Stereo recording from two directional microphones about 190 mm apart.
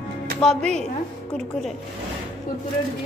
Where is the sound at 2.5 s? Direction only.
45° left (ahead or behind).